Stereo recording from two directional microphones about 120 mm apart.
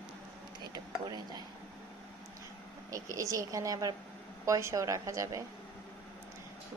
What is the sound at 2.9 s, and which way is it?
Speech, 30° right (ahead or behind).